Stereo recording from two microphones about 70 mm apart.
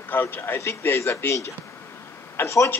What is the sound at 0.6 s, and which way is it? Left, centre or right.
Speech, left.